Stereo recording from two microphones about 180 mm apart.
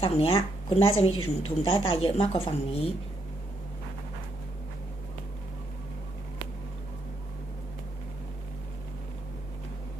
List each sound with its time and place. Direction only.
0.0 s a woman's voice: 30° left (ahead or behind)